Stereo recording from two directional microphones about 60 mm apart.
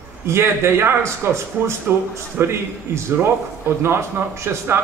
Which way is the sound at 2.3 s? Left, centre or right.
Right.